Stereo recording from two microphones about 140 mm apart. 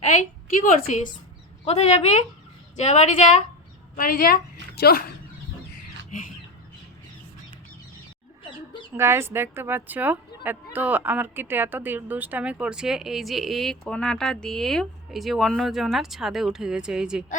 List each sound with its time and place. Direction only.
0.0 s a woman's voice: 60° left (ahead or behind)
1.6 s a woman's voice: 50° left (ahead or behind)
3.9 s a woman's voice: 90° left
9.0 s a woman's voice: 20° right (ahead or behind)